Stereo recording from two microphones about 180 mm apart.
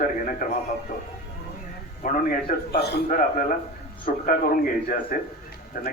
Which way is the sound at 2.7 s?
65° left (ahead or behind).